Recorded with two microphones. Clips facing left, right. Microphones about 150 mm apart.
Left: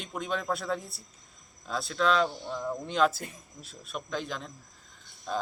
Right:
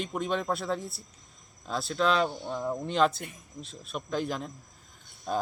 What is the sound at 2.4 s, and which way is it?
Speech, 20° right (ahead or behind).